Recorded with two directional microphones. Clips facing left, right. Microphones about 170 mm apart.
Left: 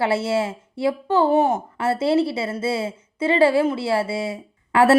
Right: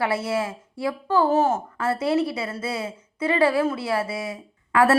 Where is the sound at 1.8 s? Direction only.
25° left (ahead or behind).